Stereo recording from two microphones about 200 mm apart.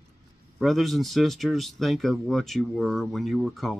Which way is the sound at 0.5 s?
Centre (ahead or behind).